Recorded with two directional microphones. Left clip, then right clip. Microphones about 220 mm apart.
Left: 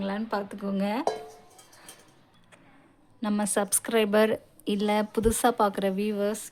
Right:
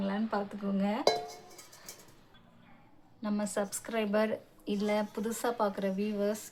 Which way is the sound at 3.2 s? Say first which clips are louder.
Left 6 dB; 45° left (ahead or behind).